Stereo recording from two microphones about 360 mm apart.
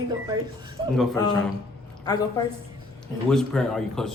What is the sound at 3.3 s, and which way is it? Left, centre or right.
Speech, centre.